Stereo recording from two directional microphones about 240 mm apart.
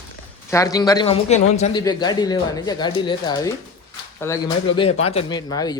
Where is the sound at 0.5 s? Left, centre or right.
Centre.